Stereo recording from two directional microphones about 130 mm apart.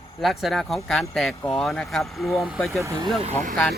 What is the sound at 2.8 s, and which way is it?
Speech, 20° right (ahead or behind).